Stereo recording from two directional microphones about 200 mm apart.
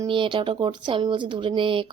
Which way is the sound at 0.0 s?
25° right (ahead or behind).